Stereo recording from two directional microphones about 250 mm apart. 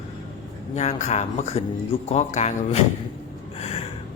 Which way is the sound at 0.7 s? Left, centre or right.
Left.